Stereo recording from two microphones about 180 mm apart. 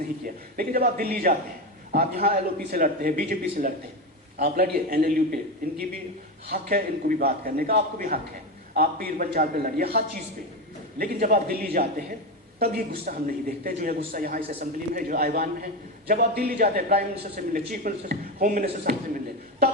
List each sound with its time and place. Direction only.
0.5 s a man's voice: 55° right (ahead or behind)